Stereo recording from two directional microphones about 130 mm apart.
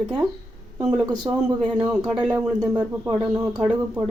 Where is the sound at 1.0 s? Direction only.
30° right (ahead or behind).